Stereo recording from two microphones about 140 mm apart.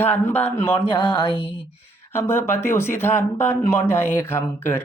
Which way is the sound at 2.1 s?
15° left (ahead or behind).